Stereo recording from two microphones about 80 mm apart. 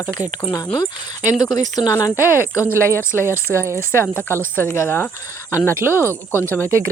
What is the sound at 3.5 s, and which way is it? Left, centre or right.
Speech, right.